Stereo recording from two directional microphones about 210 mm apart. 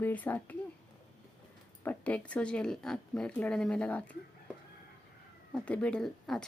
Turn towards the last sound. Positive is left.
turn(degrees=5)  # may be behind; listen again after turning